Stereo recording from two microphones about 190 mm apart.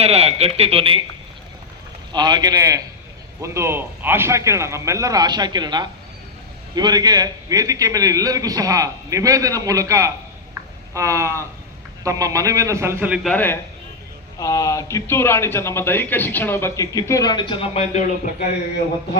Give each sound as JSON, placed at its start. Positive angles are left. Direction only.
{"t": 0.0, "sound": "speech", "side_deg": -35}
{"t": 2.1, "sound": "a man's voice", "side_deg": -20}
{"t": 13.2, "sound": "speech", "side_deg": 10}